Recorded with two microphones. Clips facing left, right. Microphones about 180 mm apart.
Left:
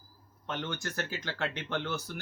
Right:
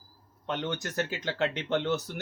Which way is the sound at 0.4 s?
20° right (ahead or behind).